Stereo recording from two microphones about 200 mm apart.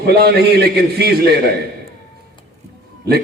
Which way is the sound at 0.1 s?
50° right (ahead or behind).